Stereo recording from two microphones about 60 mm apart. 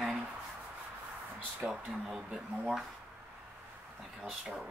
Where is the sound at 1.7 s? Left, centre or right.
Centre.